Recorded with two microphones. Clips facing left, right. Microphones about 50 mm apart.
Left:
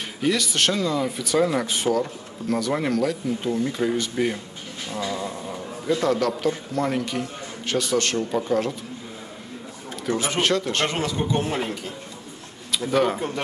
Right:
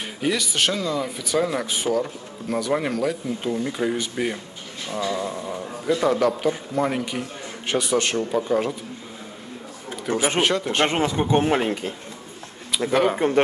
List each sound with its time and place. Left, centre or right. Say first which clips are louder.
0.2 s speech: left 1 dB; centre
4.9 s speech: right 3 dB; right
5.2 s speech: right 2 dB; centre
8.3 s speech: right 1 dB; centre
10.1 s speech: even; right
10.4 s speech: right 1 dB; centre; by 11.9 s right
12.9 s speech: right 1 dB; centre